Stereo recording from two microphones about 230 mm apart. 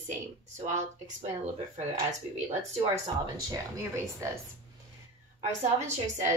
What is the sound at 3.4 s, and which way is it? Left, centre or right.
Speech, centre.